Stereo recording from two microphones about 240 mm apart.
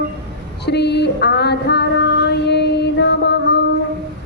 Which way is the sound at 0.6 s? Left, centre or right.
Left.